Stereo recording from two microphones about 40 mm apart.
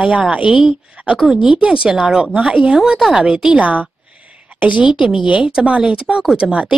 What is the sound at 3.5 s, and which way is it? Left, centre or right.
A woman's voice, right.